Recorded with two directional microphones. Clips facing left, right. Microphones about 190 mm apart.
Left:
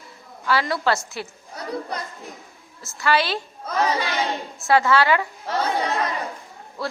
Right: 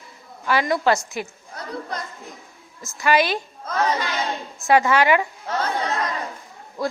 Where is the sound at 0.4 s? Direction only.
15° right (ahead or behind).